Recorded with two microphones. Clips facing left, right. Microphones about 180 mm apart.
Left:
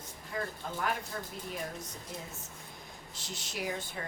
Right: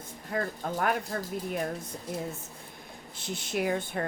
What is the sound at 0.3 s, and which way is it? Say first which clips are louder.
Speech: right 6 dB; 60° right (ahead or behind).